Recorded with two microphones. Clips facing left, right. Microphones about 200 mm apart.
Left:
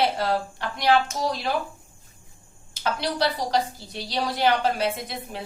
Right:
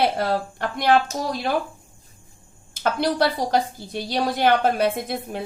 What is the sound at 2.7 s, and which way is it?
A woman's voice, 50° right (ahead or behind).